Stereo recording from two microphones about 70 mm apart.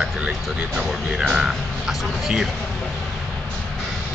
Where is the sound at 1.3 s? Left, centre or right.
Centre.